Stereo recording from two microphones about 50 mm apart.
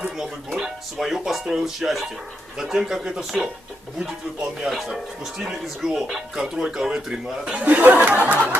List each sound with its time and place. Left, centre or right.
0.2 s speech: centre
4.7 s speech: centre
7.6 s speech: right